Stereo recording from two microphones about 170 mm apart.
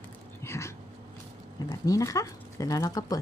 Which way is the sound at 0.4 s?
15° left (ahead or behind).